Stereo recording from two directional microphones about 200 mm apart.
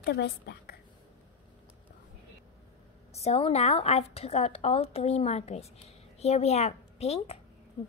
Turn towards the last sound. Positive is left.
turn(degrees=30)  # may be behind; listen again after turning